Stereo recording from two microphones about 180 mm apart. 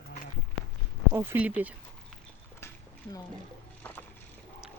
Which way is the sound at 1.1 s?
10° right (ahead or behind).